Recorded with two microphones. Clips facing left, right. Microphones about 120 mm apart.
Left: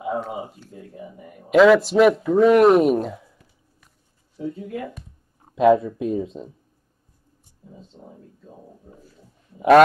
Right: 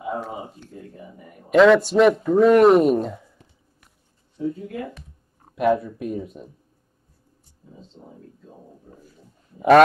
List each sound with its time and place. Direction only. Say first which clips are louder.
0.0 s speech: left 2 dB; 5° left (ahead or behind)
5.5 s speech: left 4 dB; 20° left (ahead or behind)
9.0 s a sound: even; centre (ahead or behind)